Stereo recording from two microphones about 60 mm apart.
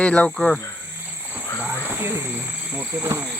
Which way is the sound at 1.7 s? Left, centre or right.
Right.